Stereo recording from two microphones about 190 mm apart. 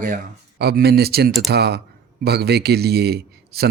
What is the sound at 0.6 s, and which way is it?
A man's voice, 55° right (ahead or behind).